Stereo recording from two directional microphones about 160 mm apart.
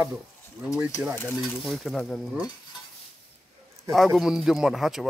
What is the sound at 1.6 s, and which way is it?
Speech, centre (ahead or behind).